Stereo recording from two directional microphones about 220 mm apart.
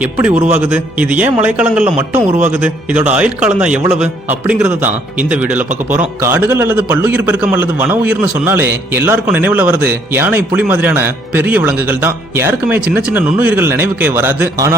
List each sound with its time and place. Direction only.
0.0 s a man's voice: 10° right (ahead or behind)